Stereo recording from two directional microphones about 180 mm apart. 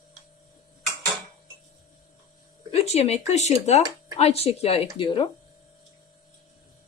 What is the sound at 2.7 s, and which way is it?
Speech, 35° left (ahead or behind).